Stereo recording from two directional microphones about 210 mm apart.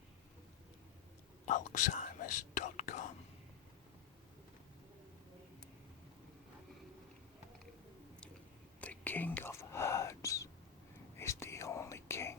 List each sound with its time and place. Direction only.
1.5 s whispering: 35° left (ahead or behind)
8.8 s whispering: 10° left (ahead or behind)